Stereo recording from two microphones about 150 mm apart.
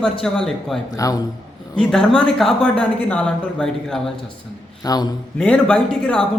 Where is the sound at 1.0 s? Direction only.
25° left (ahead or behind).